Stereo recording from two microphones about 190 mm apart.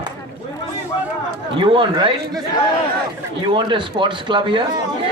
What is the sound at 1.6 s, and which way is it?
Speech, 25° right (ahead or behind).